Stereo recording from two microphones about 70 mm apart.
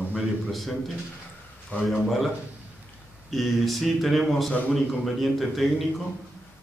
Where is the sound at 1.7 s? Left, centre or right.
Left.